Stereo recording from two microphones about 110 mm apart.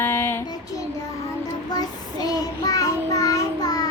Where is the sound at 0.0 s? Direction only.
20° left (ahead or behind).